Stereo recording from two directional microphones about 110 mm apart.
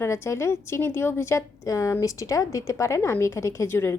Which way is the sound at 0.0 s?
25° left (ahead or behind).